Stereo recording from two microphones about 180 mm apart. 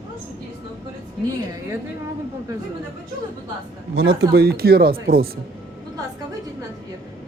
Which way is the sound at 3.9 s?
80° right.